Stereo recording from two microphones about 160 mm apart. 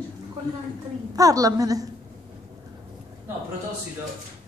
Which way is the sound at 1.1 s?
20° right (ahead or behind).